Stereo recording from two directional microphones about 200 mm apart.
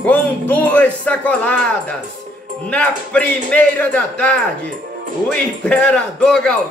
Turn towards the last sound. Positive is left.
turn(degrees=5)  # may be behind; listen again after turning